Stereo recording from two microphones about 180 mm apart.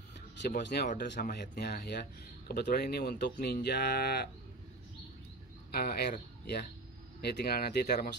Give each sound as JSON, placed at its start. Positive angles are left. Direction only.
{"t": 0.6, "sound": "speech", "side_deg": 65}
{"t": 5.7, "sound": "speech", "side_deg": 60}